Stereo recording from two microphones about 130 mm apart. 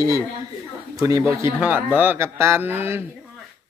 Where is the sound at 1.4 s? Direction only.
15° right (ahead or behind).